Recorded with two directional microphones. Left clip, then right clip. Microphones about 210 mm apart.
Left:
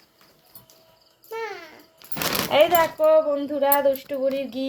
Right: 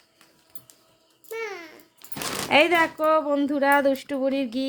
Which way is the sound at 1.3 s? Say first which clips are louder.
Left 1 dB; 20° right (ahead or behind).